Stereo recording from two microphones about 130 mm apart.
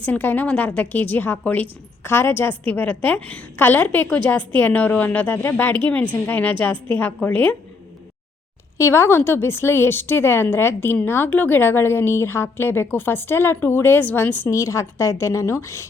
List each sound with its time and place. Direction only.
0.0 s a woman's voice: 15° left (ahead or behind)
8.8 s a woman's voice: 20° left (ahead or behind)